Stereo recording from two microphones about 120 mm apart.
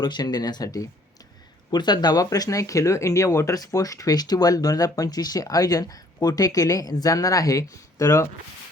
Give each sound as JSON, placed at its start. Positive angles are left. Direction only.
{"t": 0.0, "sound": "speech", "side_deg": 35}